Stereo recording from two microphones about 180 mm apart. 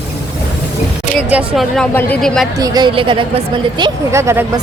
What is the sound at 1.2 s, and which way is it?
Speech, 5° right (ahead or behind).